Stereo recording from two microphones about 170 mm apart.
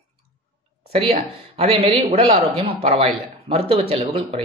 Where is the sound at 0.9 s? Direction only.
35° right (ahead or behind).